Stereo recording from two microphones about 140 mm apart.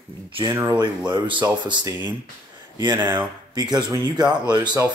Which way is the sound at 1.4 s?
30° right (ahead or behind).